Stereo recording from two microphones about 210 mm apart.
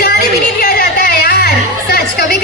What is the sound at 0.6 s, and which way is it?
Music, 50° left (ahead or behind).